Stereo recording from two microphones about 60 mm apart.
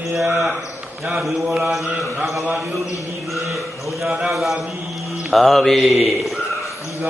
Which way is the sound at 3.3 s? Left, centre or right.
Centre.